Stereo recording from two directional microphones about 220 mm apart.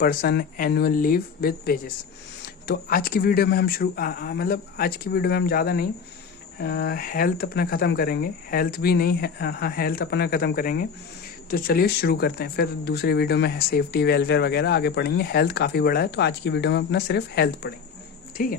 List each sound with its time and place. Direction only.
0.0 s speech: 40° left (ahead or behind)